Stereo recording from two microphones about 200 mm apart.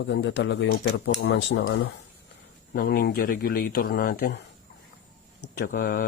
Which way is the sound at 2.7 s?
50° left (ahead or behind).